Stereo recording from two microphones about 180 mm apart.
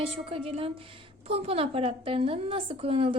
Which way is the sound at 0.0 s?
30° right (ahead or behind).